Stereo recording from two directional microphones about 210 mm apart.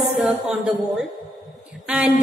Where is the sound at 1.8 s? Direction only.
5° right (ahead or behind).